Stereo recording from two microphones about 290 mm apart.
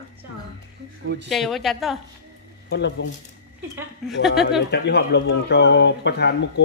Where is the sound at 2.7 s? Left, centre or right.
Left.